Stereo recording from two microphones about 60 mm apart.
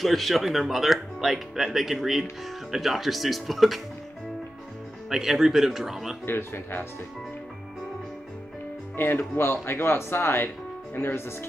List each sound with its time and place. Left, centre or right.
0.0 s speech: centre
5.1 s speech: centre
6.2 s speech: left
8.9 s speech: left